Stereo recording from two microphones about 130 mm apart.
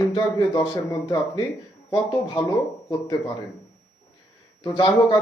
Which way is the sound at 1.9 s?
40° left (ahead or behind).